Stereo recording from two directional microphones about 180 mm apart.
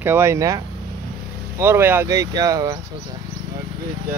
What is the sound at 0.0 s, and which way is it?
Speech, 15° right (ahead or behind).